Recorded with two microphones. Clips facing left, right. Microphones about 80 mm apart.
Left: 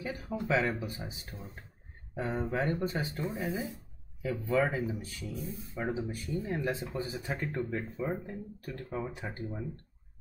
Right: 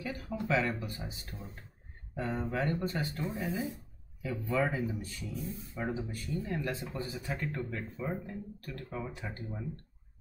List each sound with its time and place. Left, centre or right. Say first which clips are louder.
0.1 s speech: left 1 dB; centre